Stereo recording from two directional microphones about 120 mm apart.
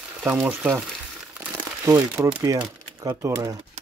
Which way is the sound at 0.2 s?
10° right (ahead or behind).